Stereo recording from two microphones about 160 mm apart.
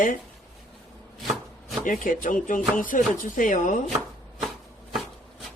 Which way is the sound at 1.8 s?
55° left (ahead or behind).